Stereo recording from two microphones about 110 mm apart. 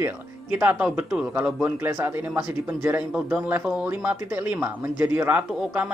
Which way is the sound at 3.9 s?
15° right (ahead or behind).